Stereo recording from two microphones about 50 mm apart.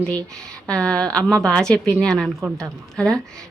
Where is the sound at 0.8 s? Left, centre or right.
Centre.